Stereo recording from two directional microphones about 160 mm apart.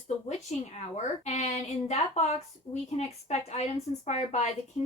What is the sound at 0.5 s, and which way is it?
Speech, 45° left (ahead or behind).